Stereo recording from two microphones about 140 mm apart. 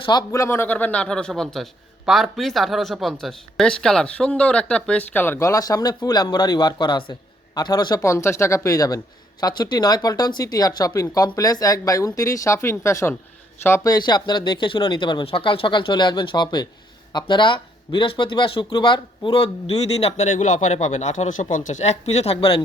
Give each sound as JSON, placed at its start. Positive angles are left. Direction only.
{"t": 0.0, "sound": "a man's voice", "side_deg": 30}